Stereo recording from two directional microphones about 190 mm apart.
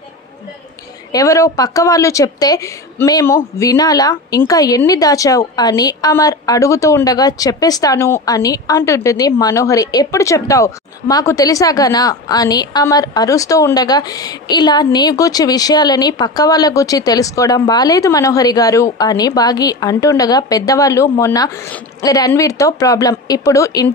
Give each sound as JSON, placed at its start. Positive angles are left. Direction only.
{"t": 1.1, "sound": "a woman's voice", "side_deg": 15}